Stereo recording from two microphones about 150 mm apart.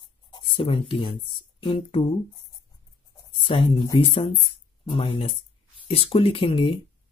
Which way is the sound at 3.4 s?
35° left (ahead or behind).